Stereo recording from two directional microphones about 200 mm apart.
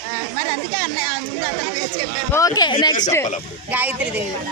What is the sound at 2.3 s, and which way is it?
Speech, 20° left (ahead or behind).